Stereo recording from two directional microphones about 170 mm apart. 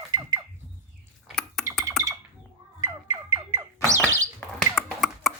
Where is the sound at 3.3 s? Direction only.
20° right (ahead or behind).